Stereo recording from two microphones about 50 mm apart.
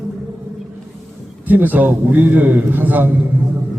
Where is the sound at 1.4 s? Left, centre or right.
Right.